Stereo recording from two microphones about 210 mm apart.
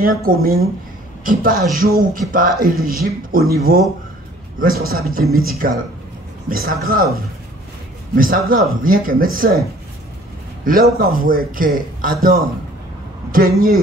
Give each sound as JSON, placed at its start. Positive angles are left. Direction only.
{"t": 0.0, "sound": "speech", "side_deg": -45}
{"t": 8.2, "sound": "speech", "side_deg": -40}
{"t": 10.6, "sound": "speech", "side_deg": -45}